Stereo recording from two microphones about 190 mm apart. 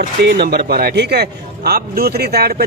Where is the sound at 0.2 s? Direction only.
60° right (ahead or behind).